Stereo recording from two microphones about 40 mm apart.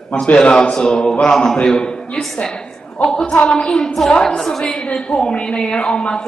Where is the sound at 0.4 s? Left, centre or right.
Left.